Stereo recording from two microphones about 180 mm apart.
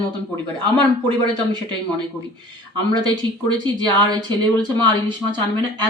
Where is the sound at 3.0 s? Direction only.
25° right (ahead or behind).